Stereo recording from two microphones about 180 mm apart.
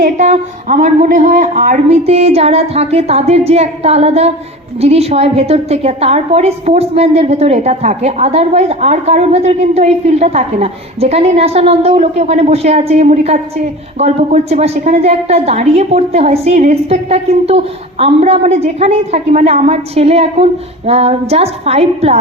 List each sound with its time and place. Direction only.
0.0 s a woman's voice: 40° right (ahead or behind)
2.0 s a woman's voice: 35° right (ahead or behind)